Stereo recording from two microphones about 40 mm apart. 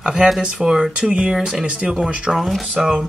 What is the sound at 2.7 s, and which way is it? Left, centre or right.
Speech, right.